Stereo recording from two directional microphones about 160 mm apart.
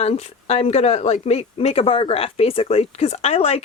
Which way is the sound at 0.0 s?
40° left (ahead or behind).